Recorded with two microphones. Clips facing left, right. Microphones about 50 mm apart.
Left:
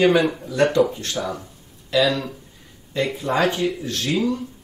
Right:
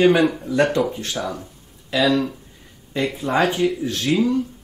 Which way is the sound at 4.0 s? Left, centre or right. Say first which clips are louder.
Right 3 dB; centre.